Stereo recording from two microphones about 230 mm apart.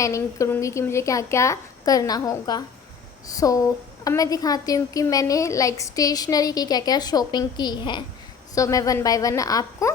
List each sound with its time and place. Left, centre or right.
0.0 s a woman's voice: centre